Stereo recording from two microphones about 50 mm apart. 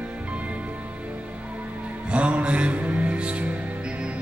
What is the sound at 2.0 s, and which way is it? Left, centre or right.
Music, right.